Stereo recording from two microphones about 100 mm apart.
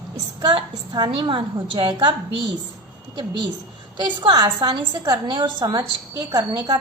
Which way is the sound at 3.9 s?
50° right (ahead or behind).